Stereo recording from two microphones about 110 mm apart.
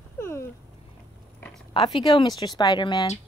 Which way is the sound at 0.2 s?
25° left (ahead or behind).